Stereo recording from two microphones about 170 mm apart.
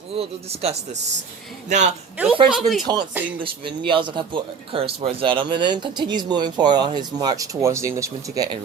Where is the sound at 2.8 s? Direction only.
25° right (ahead or behind).